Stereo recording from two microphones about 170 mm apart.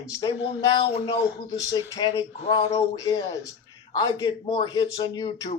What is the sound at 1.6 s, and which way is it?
A man's voice, 20° left (ahead or behind).